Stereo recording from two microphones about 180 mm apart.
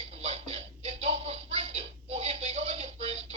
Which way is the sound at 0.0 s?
35° right (ahead or behind).